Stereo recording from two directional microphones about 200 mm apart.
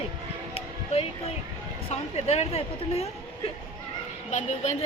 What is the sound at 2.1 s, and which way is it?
Speech, 30° left (ahead or behind).